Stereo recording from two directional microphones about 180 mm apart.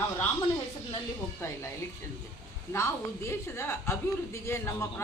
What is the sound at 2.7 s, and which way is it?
A woman's voice, 15° left (ahead or behind).